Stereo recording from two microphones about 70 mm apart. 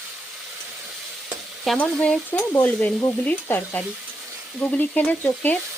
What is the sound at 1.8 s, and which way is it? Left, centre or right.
Stir, centre.